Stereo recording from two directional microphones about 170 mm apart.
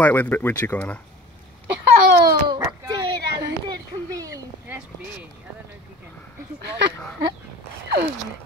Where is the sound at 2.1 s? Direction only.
70° right (ahead or behind).